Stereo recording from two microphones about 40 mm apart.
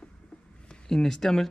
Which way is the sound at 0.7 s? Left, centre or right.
Centre.